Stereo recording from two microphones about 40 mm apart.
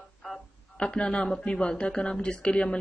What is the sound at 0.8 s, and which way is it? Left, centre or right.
Speech, left.